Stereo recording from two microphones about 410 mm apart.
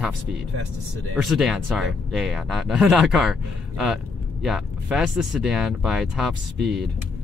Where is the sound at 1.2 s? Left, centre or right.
Centre.